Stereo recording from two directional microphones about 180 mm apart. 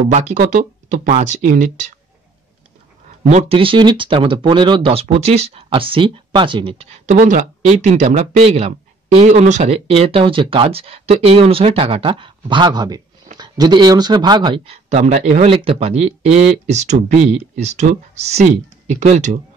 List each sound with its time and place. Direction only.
0.1 s speech: 40° right (ahead or behind)
3.3 s speech: 35° right (ahead or behind)